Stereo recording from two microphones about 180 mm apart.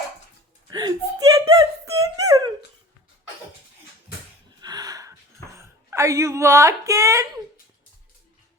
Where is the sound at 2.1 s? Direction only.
20° right (ahead or behind).